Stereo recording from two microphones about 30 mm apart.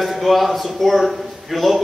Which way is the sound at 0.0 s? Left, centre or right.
Centre.